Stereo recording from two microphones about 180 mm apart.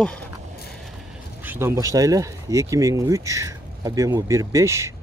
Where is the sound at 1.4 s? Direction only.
10° right (ahead or behind).